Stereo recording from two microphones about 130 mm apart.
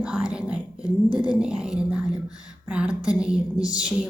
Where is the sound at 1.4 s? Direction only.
5° right (ahead or behind).